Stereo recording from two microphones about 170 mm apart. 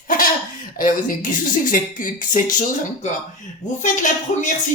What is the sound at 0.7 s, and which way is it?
Speech, 50° left (ahead or behind).